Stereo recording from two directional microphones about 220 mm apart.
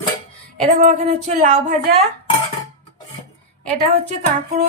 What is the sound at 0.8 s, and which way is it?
A woman's voice, 35° right (ahead or behind).